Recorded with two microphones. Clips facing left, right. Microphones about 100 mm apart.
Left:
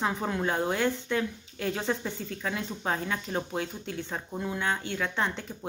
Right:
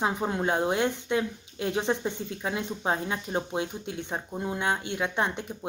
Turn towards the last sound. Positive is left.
turn(degrees=-20)  # may be behind; listen again after turning